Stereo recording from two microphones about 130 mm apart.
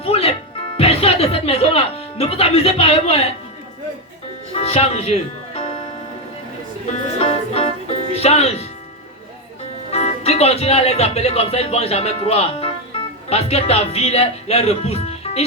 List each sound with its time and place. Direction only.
0.0 s music: 50° left (ahead or behind)
4.5 s music: 50° left (ahead or behind)
7.2 s music: 50° left (ahead or behind)
9.9 s speech: 55° left (ahead or behind)